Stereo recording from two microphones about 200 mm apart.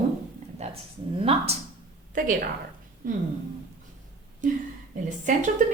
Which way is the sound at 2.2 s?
40° right (ahead or behind).